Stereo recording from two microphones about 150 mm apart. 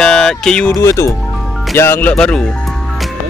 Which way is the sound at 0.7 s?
20° left (ahead or behind).